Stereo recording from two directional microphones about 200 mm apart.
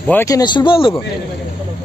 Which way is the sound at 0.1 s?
15° left (ahead or behind).